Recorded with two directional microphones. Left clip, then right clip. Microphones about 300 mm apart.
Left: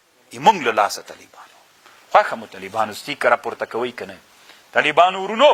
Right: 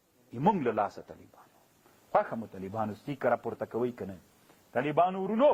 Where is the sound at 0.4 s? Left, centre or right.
Centre.